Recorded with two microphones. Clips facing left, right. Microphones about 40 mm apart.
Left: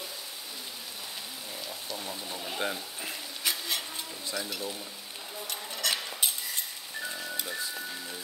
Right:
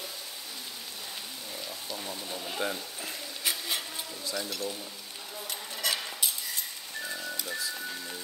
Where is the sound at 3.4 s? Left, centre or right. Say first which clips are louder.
Even; centre.